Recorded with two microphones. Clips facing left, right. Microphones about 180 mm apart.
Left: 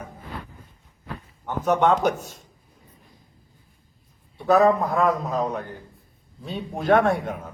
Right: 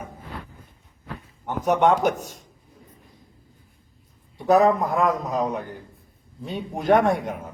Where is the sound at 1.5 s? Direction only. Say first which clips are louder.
Right 1 dB; 15° right (ahead or behind).